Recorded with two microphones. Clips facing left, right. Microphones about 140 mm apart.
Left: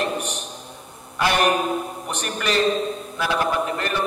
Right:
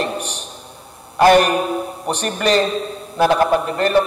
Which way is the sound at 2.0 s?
35° right (ahead or behind).